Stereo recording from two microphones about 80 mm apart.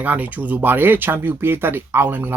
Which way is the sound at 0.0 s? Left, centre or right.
Centre.